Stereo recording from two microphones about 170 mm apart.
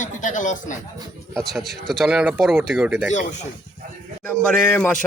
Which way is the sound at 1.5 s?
Centre (ahead or behind).